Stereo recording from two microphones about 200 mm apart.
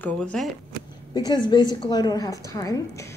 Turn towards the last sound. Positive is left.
turn(degrees=15)  # may be behind; listen again after turning